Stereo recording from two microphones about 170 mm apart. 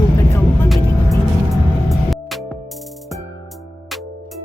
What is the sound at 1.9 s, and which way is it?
Music, centre (ahead or behind).